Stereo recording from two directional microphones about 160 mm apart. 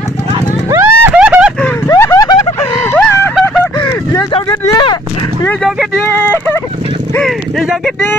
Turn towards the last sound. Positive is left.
turn(degrees=0)  # may be behind; listen again after turning